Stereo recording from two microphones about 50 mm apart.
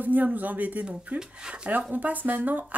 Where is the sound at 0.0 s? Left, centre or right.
Right.